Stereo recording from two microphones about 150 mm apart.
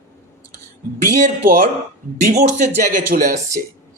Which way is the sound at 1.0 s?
60° right (ahead or behind).